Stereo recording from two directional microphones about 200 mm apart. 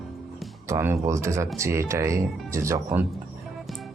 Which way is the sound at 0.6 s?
15° right (ahead or behind).